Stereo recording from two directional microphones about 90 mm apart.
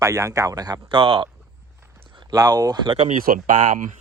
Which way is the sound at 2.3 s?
45° right (ahead or behind).